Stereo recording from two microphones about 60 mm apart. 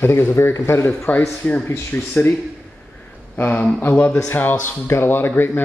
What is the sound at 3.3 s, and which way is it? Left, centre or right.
Speech, left.